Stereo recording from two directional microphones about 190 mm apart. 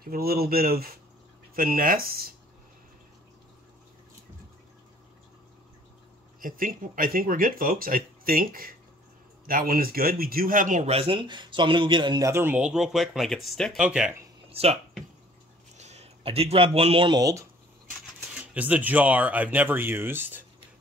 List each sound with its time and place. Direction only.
0.0 s speech: 50° right (ahead or behind)
6.4 s speech: 45° right (ahead or behind); by 14.1 s 5° right (ahead or behind)
14.5 s speech: 35° right (ahead or behind)
15.8 s speech: 35° right (ahead or behind); by 17.5 s 20° right (ahead or behind)
18.3 s speech: 5° right (ahead or behind)